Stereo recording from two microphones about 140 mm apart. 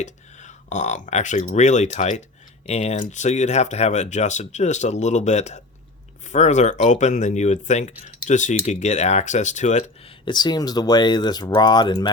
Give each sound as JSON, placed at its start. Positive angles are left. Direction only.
{"t": 0.0, "sound": "speech", "side_deg": 60}
{"t": 10.0, "sound": "speech", "side_deg": 35}